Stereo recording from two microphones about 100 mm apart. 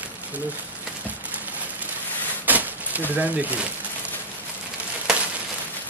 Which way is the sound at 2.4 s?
15° right (ahead or behind).